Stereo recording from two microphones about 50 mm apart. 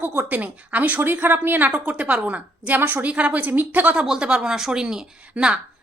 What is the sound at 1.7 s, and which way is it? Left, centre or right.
A woman's voice, right.